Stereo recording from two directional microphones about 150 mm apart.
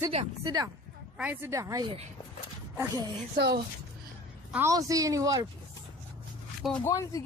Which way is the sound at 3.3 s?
90° right.